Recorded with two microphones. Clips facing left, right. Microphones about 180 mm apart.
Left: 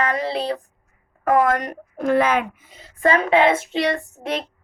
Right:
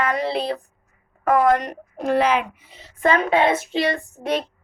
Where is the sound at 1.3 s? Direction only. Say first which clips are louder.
Right 1 dB; 45° left (ahead or behind).